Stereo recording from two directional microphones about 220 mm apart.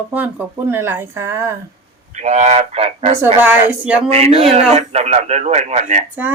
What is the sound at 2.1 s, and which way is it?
Speech, 30° right (ahead or behind).